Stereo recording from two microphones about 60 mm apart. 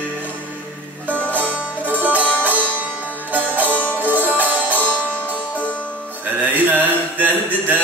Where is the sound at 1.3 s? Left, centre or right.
Right.